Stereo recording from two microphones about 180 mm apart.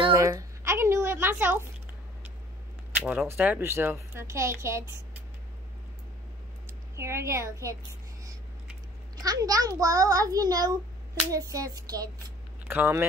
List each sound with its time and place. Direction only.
0.1 s a sound: 15° right (ahead or behind)
3.1 s speech: 5° right (ahead or behind)
7.0 s speech: 15° right (ahead or behind)
9.2 s a child's voice: 20° right (ahead or behind)